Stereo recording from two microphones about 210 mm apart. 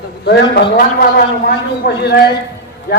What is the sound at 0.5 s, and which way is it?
A man's voice, 45° left (ahead or behind).